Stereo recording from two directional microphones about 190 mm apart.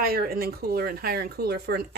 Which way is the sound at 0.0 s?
50° right (ahead or behind).